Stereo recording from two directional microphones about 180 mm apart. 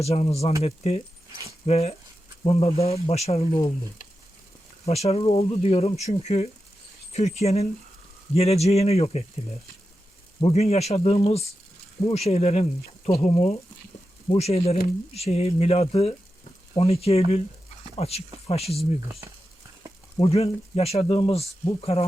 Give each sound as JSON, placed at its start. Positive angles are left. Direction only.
{"t": 0.0, "sound": "speech", "side_deg": 35}
{"t": 4.9, "sound": "speech", "side_deg": 35}
{"t": 10.4, "sound": "speech", "side_deg": 35}
{"t": 20.1, "sound": "speech", "side_deg": 35}